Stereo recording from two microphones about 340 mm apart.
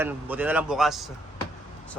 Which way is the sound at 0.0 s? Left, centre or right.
Centre.